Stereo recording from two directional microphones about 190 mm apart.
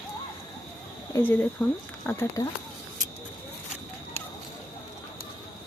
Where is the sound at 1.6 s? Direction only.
20° left (ahead or behind).